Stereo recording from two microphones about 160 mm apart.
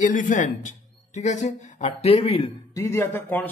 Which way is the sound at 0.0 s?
55° left (ahead or behind).